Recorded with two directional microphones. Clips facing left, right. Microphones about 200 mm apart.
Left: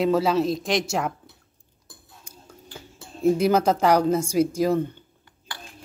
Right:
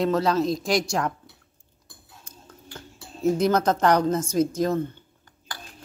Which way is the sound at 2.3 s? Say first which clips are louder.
Left 1 dB; 10° left (ahead or behind).